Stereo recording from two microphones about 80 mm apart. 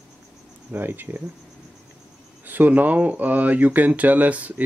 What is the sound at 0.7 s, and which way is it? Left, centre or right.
Speech, right.